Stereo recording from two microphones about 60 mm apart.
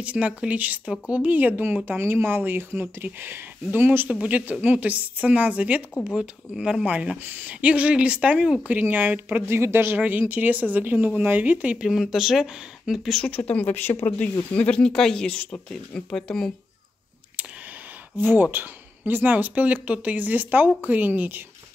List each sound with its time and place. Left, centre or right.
0.0 s speech: right
1.9 s speech: right
4.1 s speech: right
6.1 s speech: centre
8.6 s speech: right
9.5 s speech: right
10.0 s speech: right
11.7 s speech: centre
13.2 s speech: left; by 16.5 s centre
18.1 s speech: right